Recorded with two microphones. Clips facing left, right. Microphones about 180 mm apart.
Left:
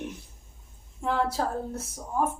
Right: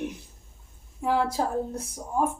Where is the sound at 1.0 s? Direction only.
10° right (ahead or behind).